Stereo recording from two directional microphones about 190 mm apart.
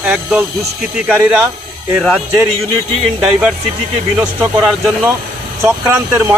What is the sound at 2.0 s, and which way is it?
A man's voice, centre (ahead or behind).